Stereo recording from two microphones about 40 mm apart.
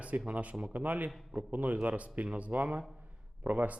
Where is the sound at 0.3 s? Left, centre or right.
Right.